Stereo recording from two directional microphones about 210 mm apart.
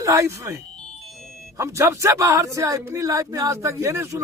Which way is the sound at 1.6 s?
15° right (ahead or behind).